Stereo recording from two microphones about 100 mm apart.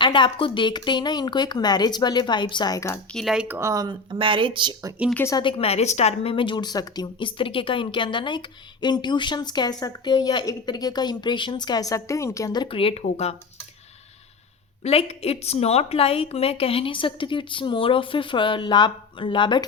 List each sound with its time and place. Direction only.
0.0 s a woman's voice: 55° left (ahead or behind)
3.1 s speech: 5° left (ahead or behind)
3.3 s speech: 15° right (ahead or behind)
3.6 s speech: 35° right (ahead or behind)
4.1 s speech: 55° right (ahead or behind)
5.4 s a woman's voice: 65° left (ahead or behind); by 12.6 s 35° left (ahead or behind)
12.7 s speech: 80° left
14.8 s a woman's voice: 90° left; by 19.6 s 55° left (ahead or behind)